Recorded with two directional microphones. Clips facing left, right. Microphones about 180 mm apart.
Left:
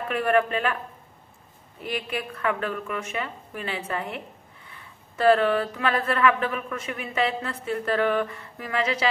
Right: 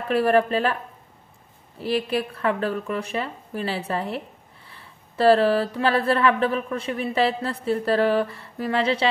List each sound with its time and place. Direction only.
0.1 s speech: 35° right (ahead or behind)
1.8 s speech: 35° right (ahead or behind)